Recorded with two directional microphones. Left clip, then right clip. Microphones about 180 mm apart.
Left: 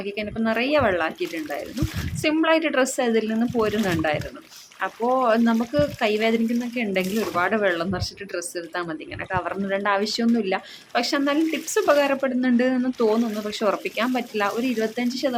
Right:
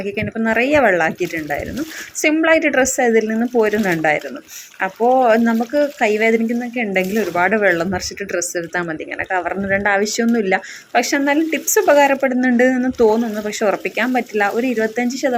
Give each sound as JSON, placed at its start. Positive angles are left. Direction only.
{"t": 0.0, "sound": "speech", "side_deg": -15}